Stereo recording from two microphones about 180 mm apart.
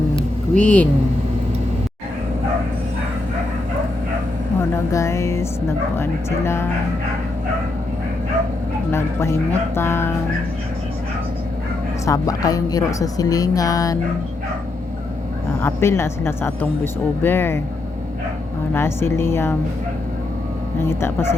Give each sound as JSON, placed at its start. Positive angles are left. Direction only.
{"t": 0.5, "sound": "speech", "side_deg": 10}
{"t": 4.7, "sound": "speech", "side_deg": 15}
{"t": 8.9, "sound": "speech", "side_deg": 15}
{"t": 12.0, "sound": "speech", "side_deg": 20}
{"t": 15.6, "sound": "speech", "side_deg": 15}
{"t": 18.7, "sound": "speech", "side_deg": 15}
{"t": 20.8, "sound": "speech", "side_deg": 15}